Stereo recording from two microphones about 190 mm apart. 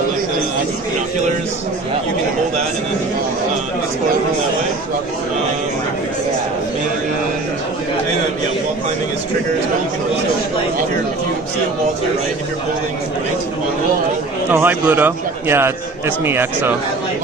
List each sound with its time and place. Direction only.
14.5 s a man's voice: 10° right (ahead or behind)